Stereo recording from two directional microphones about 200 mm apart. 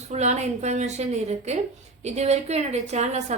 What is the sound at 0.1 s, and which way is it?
A woman's voice, 35° right (ahead or behind).